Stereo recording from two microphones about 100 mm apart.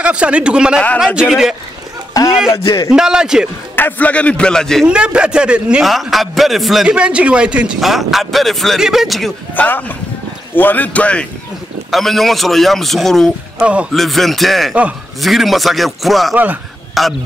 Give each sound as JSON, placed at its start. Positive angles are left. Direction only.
{"t": 0.0, "sound": "a man's voice", "side_deg": -10}
{"t": 2.1, "sound": "a sound", "side_deg": 35}
{"t": 2.6, "sound": "a man's voice", "side_deg": 40}
{"t": 2.9, "sound": "speech", "side_deg": -5}
{"t": 3.7, "sound": "a man's voice", "side_deg": 20}
{"t": 4.8, "sound": "a man's voice", "side_deg": -10}
{"t": 9.5, "sound": "a man's voice", "side_deg": 20}
{"t": 11.9, "sound": "a man's voice", "side_deg": 0}
{"t": 13.6, "sound": "speech", "side_deg": -10}
{"t": 13.9, "sound": "a man's voice", "side_deg": 0}